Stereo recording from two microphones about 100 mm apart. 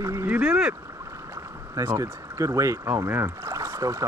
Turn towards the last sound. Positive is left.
turn(degrees=-30)  # may be behind; listen again after turning